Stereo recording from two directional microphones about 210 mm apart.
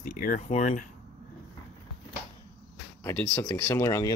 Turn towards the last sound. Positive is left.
turn(degrees=15)  # may be behind; listen again after turning